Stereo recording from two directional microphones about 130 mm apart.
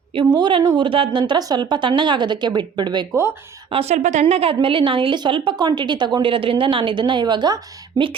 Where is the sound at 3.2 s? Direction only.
20° right (ahead or behind).